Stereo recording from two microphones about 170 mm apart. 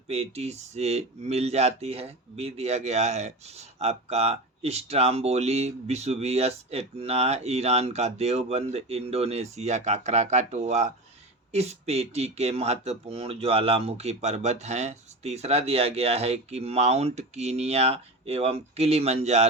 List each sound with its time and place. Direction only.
0.1 s speech: 35° right (ahead or behind)